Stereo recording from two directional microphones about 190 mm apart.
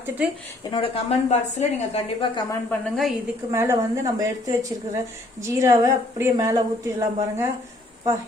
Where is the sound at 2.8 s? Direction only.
Centre (ahead or behind).